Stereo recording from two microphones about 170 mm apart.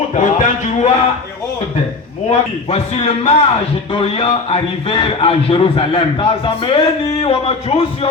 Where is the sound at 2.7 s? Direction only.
35° left (ahead or behind).